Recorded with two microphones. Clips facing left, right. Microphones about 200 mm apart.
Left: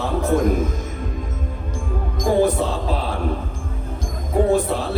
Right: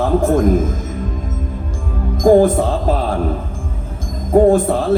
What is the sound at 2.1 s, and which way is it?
Speech, 50° right (ahead or behind).